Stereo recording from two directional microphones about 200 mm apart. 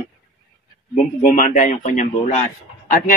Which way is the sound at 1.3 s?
40° left (ahead or behind).